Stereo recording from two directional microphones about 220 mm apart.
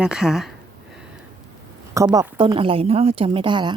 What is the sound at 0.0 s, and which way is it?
Speech, 5° right (ahead or behind).